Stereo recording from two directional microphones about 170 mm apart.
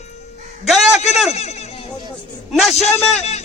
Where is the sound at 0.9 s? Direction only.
40° left (ahead or behind).